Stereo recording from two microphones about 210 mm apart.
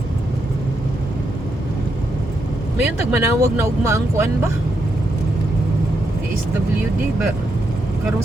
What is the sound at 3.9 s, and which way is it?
Speech, 15° right (ahead or behind).